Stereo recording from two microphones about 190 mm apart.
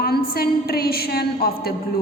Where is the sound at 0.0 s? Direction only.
55° left (ahead or behind).